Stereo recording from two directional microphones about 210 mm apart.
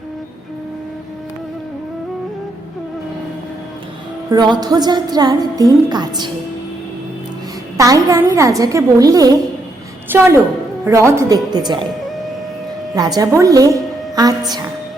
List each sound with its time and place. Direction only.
4.3 s a woman's voice: 20° right (ahead or behind)
7.8 s a woman's voice: 15° right (ahead or behind)
13.0 s a woman's voice: 15° right (ahead or behind)